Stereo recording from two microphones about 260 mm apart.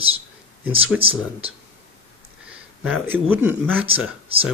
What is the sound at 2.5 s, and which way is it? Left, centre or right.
Speech, centre.